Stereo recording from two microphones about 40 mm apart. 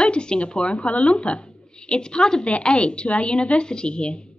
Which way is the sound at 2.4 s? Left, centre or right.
Left.